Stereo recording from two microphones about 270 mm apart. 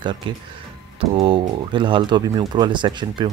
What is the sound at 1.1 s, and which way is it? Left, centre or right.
Speech, centre.